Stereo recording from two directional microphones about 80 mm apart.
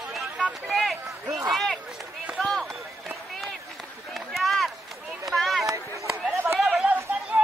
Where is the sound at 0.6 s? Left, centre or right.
Centre.